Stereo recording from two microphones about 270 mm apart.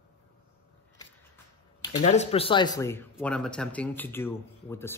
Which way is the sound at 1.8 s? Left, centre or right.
Left.